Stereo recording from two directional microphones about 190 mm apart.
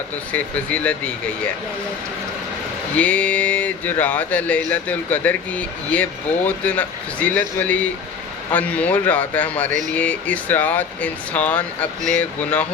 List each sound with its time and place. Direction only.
0.3 s speech: 5° left (ahead or behind)
2.9 s speech: 10° left (ahead or behind)